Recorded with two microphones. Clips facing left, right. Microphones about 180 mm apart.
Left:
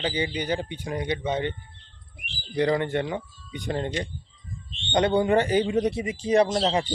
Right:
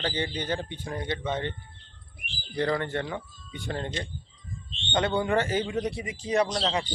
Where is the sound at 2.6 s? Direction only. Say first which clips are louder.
Left 4 dB; 15° left (ahead or behind).